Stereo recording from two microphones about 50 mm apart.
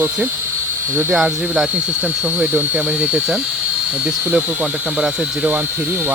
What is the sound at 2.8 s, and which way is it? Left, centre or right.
Speech, right.